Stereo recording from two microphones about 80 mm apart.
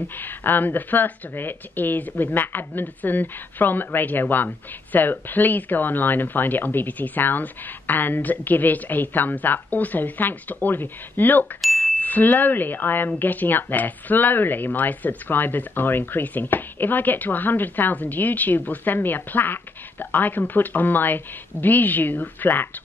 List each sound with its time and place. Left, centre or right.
0.2 s speech: left